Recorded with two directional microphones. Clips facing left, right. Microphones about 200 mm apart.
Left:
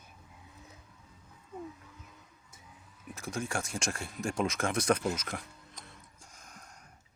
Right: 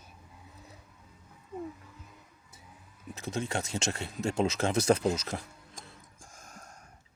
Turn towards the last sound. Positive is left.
turn(degrees=-45)  # may be behind; listen again after turning